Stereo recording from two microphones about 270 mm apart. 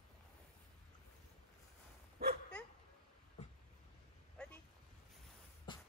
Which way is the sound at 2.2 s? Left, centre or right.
Right.